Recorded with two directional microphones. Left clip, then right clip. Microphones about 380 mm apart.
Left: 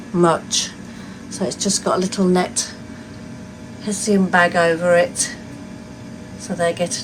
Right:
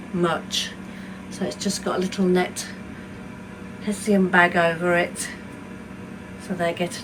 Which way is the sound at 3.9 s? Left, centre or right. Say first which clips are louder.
Left 3 dB; centre.